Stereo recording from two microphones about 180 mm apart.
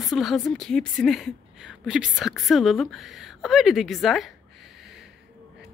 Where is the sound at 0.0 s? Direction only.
Centre (ahead or behind).